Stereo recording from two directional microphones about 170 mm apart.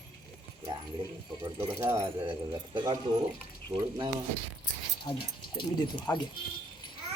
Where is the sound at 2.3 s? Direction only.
30° right (ahead or behind).